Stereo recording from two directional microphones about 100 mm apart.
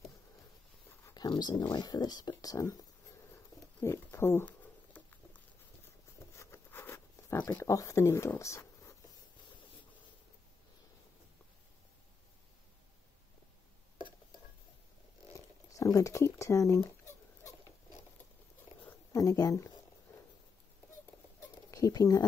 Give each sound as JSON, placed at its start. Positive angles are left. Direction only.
{"t": 1.1, "sound": "speech", "side_deg": 45}
{"t": 3.8, "sound": "patter", "side_deg": 25}
{"t": 6.3, "sound": "patter", "side_deg": 30}
{"t": 7.6, "sound": "speech", "side_deg": 35}
{"t": 8.4, "sound": "a sound", "side_deg": 30}
{"t": 15.3, "sound": "speech", "side_deg": 35}
{"t": 19.1, "sound": "speech", "side_deg": 35}
{"t": 21.4, "sound": "a sound", "side_deg": 35}